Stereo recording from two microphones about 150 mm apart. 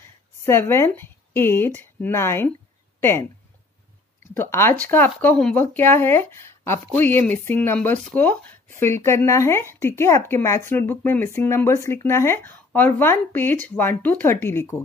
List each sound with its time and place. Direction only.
0.5 s speech: 15° left (ahead or behind)
4.3 s speech: 15° left (ahead or behind)